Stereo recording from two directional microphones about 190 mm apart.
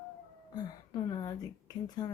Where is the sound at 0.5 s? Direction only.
20° left (ahead or behind).